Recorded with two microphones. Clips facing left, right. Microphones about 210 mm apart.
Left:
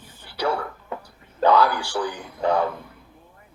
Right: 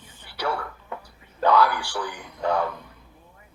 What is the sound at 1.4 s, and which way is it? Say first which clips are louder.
Speech: left 2 dB; 25° left (ahead or behind).